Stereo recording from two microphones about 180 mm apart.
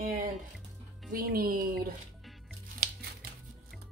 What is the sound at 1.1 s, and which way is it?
Speech, 55° right (ahead or behind).